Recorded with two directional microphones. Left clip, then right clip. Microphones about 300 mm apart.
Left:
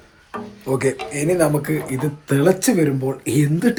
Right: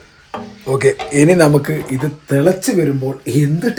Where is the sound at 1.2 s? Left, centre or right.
Right.